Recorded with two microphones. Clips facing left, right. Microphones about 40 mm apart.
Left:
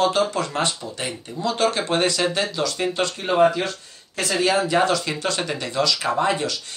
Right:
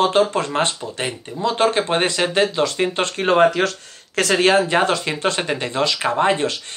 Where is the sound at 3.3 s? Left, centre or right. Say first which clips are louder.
Right 3 dB; right.